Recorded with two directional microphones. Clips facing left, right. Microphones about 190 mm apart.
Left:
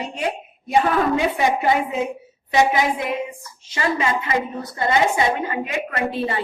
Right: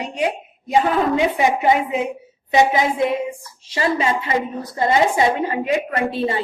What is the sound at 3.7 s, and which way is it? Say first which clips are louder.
A woman's voice: right 2 dB; 30° right (ahead or behind).